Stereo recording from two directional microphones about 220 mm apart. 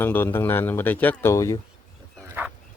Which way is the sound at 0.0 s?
10° left (ahead or behind).